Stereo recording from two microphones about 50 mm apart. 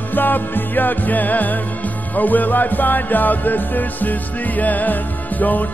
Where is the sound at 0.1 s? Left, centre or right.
Left.